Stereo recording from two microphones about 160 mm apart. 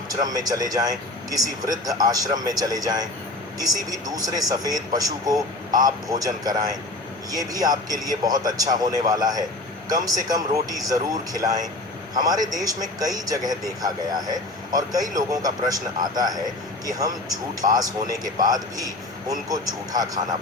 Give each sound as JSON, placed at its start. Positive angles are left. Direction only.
{"t": 0.2, "sound": "a man's voice", "side_deg": -25}